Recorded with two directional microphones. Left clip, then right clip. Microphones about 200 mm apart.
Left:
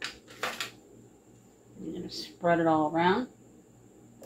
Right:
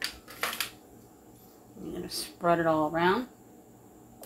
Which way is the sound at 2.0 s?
40° right (ahead or behind).